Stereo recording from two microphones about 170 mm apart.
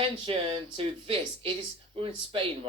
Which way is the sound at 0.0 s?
30° right (ahead or behind).